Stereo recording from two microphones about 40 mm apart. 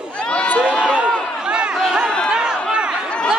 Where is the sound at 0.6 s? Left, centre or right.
Right.